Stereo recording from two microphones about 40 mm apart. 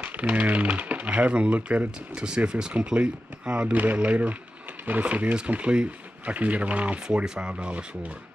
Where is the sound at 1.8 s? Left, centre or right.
Right.